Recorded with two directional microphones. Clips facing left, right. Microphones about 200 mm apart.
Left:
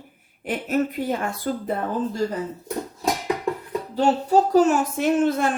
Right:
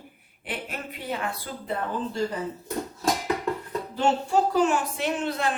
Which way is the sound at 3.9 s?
40° left (ahead or behind).